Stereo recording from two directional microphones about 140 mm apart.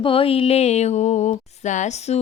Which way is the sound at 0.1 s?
40° left (ahead or behind).